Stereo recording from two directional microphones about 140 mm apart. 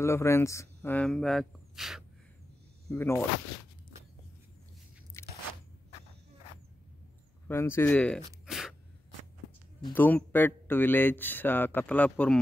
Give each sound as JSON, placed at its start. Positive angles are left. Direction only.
{"t": 0.0, "sound": "speech", "side_deg": 20}
{"t": 0.9, "sound": "speech", "side_deg": 5}
{"t": 2.9, "sound": "speech", "side_deg": 15}
{"t": 5.2, "sound": "biting", "side_deg": 15}
{"t": 7.4, "sound": "speech", "side_deg": 15}
{"t": 8.5, "sound": "a sound", "side_deg": -5}
{"t": 9.9, "sound": "speech", "side_deg": 15}